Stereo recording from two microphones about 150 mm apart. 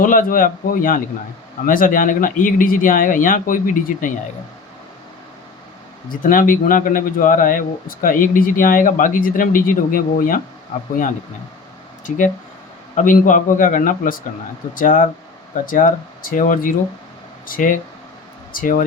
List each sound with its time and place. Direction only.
0.0 s speech: 65° left (ahead or behind)
6.2 s speech: 65° left (ahead or behind)
12.0 s speech: 60° left (ahead or behind)